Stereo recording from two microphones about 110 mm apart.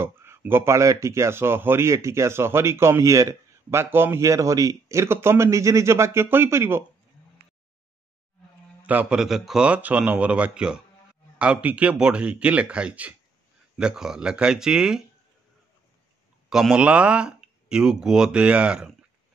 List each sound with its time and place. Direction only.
0.0 s speech: 20° right (ahead or behind)
8.8 s speech: 10° right (ahead or behind)
16.4 s speech: 5° right (ahead or behind)